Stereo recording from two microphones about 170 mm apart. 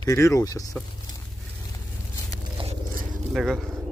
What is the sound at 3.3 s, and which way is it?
Speech, centre (ahead or behind).